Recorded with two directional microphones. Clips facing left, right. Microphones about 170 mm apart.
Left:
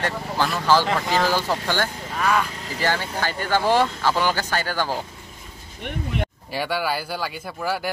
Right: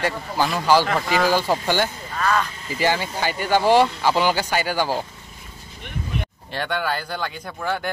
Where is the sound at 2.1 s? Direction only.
10° left (ahead or behind).